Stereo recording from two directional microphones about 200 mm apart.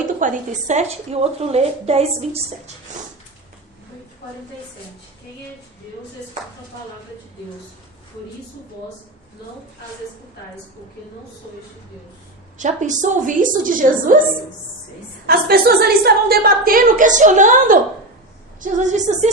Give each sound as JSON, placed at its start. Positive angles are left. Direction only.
{"t": 0.0, "sound": "a woman's voice", "side_deg": -40}
{"t": 12.5, "sound": "a woman's voice", "side_deg": -35}
{"t": 15.3, "sound": "a woman's voice", "side_deg": -50}